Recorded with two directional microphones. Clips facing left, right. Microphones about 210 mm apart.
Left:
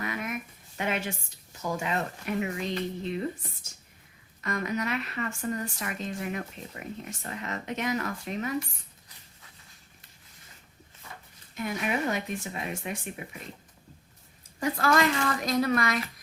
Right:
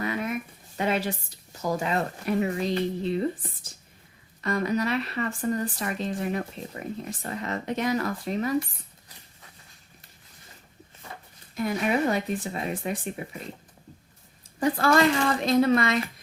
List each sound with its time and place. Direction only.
0.0 s a sound: 30° right (ahead or behind)
0.8 s a woman's voice: 35° right (ahead or behind)
11.5 s speech: 35° right (ahead or behind)
14.6 s a woman's voice: 30° right (ahead or behind)